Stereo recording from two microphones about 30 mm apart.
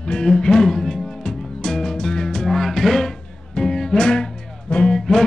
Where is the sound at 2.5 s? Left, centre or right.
Centre.